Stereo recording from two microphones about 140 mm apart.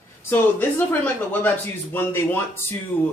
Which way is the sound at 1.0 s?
15° left (ahead or behind).